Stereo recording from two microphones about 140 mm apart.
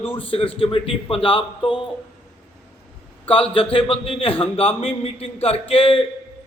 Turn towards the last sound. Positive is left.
turn(degrees=40)  # may be behind; listen again after turning